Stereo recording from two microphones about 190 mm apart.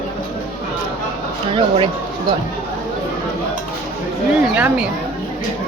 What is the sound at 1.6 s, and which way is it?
Speech, 25° right (ahead or behind).